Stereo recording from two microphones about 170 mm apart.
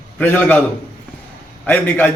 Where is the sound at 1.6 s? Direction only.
10° left (ahead or behind).